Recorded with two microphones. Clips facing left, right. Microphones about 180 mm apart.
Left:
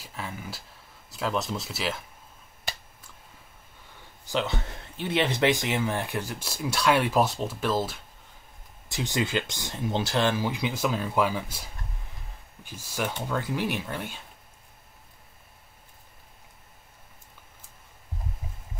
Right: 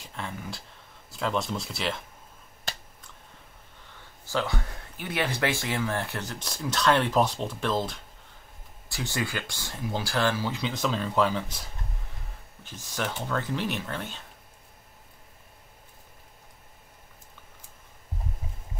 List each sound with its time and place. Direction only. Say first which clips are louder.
0.0 s speech: even; 5° left (ahead or behind)
4.3 s speech: left 1 dB; 20° left (ahead or behind); by 8.0 s 5° left (ahead or behind)
8.9 s speech: left 4 dB; 20° left (ahead or behind)
12.6 s speech: left 1 dB; 10° left (ahead or behind)